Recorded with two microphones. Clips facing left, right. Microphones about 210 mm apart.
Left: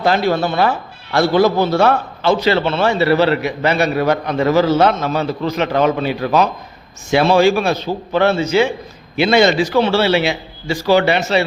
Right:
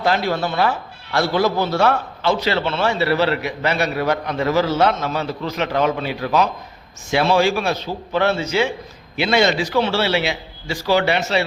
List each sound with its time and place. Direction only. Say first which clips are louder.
0.3 s a man's voice: left 4 dB; 55° left (ahead or behind)
7.1 s a man's voice: left 5 dB; 55° left (ahead or behind)